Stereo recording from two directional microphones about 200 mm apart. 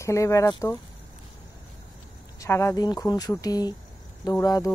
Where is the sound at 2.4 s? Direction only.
15° left (ahead or behind).